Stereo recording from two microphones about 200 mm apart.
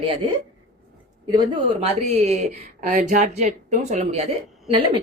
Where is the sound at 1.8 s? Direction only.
30° right (ahead or behind).